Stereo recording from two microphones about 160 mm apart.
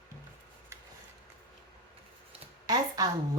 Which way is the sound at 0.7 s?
15° right (ahead or behind).